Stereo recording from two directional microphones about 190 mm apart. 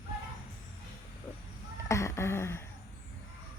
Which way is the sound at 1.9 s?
15° left (ahead or behind).